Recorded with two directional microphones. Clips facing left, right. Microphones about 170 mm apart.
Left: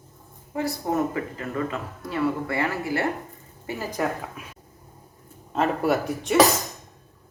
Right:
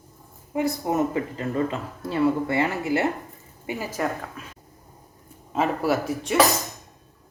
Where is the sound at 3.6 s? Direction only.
10° right (ahead or behind).